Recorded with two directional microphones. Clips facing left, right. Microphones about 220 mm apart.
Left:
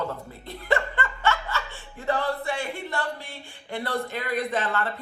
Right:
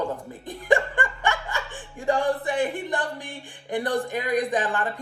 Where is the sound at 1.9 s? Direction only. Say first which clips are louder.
Right 3 dB; 15° right (ahead or behind).